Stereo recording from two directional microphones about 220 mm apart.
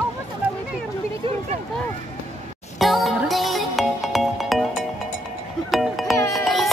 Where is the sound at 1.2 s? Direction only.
25° right (ahead or behind).